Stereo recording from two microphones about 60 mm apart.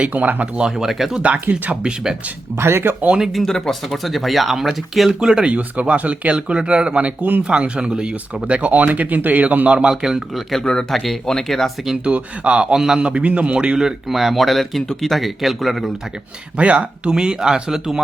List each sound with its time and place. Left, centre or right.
0.0 s speech: right
0.6 s a man's voice: centre
1.2 s speech: right
1.8 s a man's voice: centre
2.6 s speech: right
3.4 s speech: centre
5.5 s speech: right
7.4 s a man's voice: centre
9.7 s a man's voice: centre
10.6 s speech: centre
10.8 s speech: centre
12.0 s a man's voice: right; by 15.9 s centre
16.6 s a man's voice: right